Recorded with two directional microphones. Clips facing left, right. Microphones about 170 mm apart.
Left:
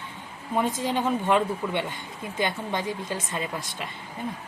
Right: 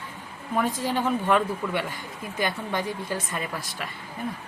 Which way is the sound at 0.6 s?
20° left (ahead or behind).